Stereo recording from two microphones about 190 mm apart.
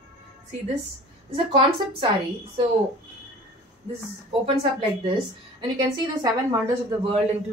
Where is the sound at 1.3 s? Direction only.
30° right (ahead or behind).